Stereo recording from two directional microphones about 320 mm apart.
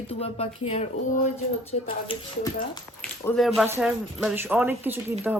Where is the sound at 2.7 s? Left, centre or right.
Centre.